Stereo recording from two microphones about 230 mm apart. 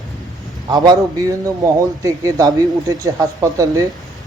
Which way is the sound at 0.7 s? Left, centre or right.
Centre.